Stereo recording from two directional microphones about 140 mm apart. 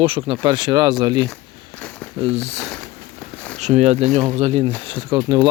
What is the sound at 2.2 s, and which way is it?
Speech, 50° right (ahead or behind).